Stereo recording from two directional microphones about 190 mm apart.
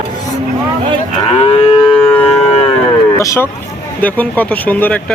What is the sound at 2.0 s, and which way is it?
Livestock, 10° left (ahead or behind).